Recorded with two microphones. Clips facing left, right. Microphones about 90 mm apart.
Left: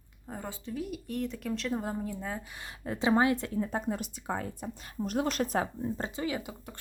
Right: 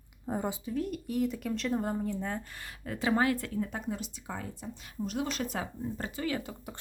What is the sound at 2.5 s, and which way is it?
Speech, 25° left (ahead or behind).